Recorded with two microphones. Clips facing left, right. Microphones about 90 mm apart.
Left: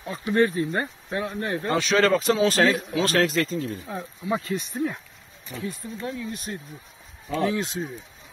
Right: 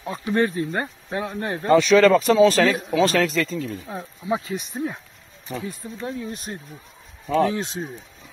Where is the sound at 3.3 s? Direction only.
30° left (ahead or behind).